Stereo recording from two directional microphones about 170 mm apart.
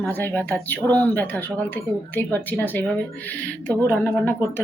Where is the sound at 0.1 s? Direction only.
10° left (ahead or behind).